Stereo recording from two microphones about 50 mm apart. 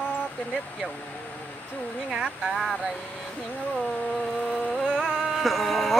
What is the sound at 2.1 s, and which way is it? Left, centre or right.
Speech, centre.